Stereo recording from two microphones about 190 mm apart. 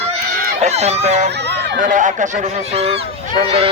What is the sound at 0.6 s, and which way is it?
Speech, 35° right (ahead or behind).